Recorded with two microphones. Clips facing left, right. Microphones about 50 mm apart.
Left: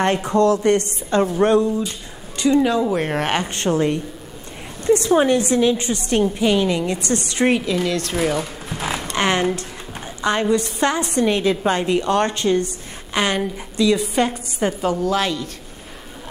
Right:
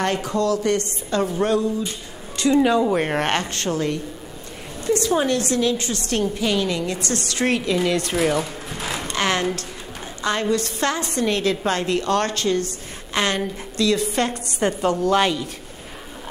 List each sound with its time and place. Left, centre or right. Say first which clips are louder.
0.0 s a woman's voice: left 5 dB; left
2.6 s speech: right 1 dB; centre
3.3 s a woman's voice: left 4 dB; left
5.2 s a woman's voice: left 4 dB; centre
7.6 s speech: even; centre
9.1 s speech: left 3 dB; left
10.5 s a woman's voice: left 3 dB; centre